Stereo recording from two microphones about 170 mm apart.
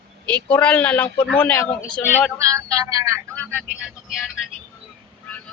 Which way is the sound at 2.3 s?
20° right (ahead or behind).